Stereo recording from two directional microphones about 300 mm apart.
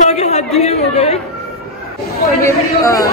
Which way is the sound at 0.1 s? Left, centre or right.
Left.